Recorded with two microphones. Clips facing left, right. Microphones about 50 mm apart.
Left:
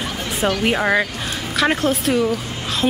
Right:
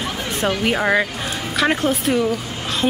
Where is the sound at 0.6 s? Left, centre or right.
Centre.